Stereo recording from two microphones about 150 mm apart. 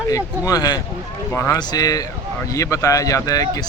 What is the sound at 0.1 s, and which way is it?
A man's voice, 25° left (ahead or behind).